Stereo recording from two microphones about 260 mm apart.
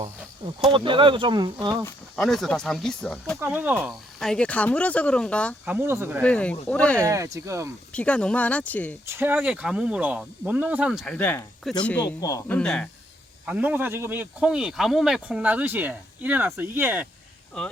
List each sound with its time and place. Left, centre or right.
0.7 s speech: centre
1.8 s speech: centre
5.6 s speech: centre
6.2 s speech: centre
7.0 s speech: centre
7.9 s speech: centre
9.0 s speech: centre